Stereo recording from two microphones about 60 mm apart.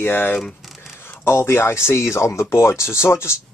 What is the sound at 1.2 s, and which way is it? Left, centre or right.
Speech, left.